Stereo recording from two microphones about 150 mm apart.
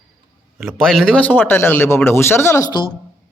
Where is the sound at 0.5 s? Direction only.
Centre (ahead or behind); by 2.7 s 15° left (ahead or behind).